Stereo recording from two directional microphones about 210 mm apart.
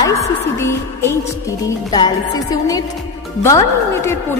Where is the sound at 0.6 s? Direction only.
10° left (ahead or behind).